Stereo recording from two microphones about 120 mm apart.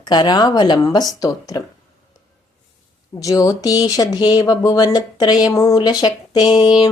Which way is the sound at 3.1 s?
30° left (ahead or behind).